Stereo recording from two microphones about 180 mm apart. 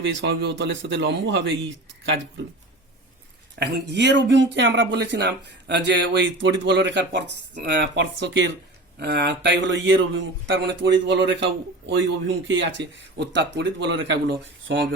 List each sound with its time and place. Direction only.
0.0 s speech: 85° right
3.6 s speech: 70° right (ahead or behind)
9.0 s speech: 65° right (ahead or behind); by 14.8 s 85° right